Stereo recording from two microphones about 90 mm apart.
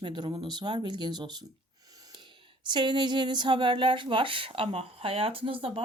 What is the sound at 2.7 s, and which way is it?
A woman's voice, 60° right (ahead or behind).